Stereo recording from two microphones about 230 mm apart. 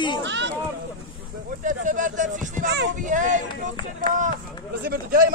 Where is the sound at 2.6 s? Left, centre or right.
Right.